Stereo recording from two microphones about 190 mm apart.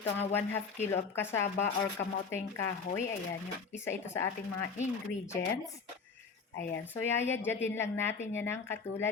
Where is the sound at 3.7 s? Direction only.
15° left (ahead or behind).